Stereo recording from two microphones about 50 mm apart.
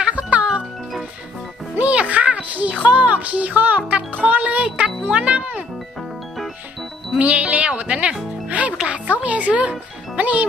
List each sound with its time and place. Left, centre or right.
0.0 s music: right
1.8 s music: right
5.0 s speech: right
7.2 s speech: right